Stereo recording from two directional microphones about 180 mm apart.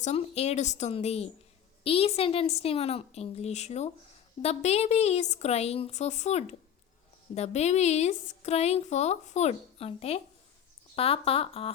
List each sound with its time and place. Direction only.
0.0 s a woman's voice: 35° left (ahead or behind)